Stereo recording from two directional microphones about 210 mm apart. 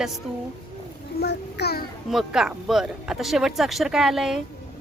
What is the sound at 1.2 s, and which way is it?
Speech, 50° left (ahead or behind).